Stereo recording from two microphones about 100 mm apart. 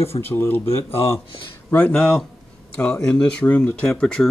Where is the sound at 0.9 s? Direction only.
70° left (ahead or behind).